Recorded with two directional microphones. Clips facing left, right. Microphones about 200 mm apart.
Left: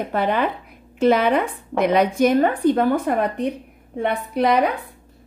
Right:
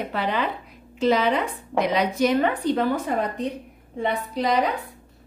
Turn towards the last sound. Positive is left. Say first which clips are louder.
# left 4 dB
turn(degrees=60)  # may be behind; listen again after turning